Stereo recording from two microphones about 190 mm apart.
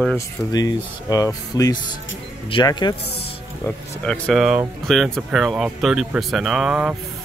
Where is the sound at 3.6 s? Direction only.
5° left (ahead or behind).